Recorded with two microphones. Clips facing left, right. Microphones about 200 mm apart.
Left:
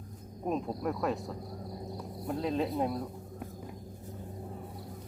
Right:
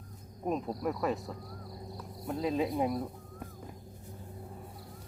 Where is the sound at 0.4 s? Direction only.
Centre (ahead or behind).